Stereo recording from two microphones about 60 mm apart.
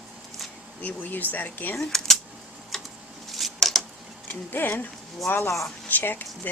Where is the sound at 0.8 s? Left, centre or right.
Left.